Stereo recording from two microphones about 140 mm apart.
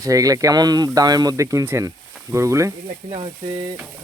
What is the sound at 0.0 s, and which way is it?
Speech, 25° right (ahead or behind).